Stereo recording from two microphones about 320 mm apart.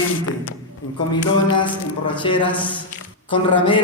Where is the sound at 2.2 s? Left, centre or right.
Centre.